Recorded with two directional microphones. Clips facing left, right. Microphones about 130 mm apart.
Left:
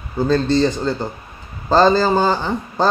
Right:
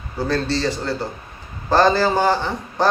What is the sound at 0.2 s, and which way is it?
A man's voice, 15° left (ahead or behind).